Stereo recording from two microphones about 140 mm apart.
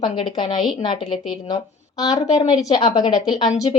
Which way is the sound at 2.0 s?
25° left (ahead or behind).